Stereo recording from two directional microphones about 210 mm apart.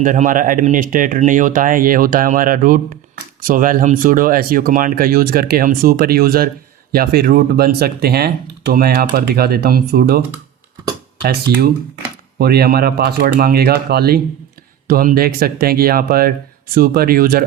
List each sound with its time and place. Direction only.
0.0 s speech: 40° right (ahead or behind)